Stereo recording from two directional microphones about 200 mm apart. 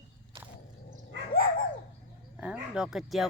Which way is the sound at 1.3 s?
50° left (ahead or behind).